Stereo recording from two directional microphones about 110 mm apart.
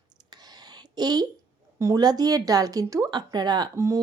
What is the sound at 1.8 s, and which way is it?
A woman's voice, 35° right (ahead or behind).